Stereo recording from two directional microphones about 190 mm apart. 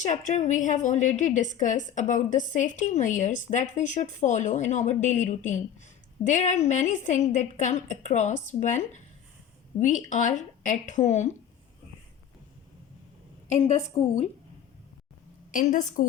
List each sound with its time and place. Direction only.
0.0 s a woman's voice: 40° left (ahead or behind)
13.5 s a woman's voice: 35° left (ahead or behind)
15.5 s a woman's voice: 40° left (ahead or behind)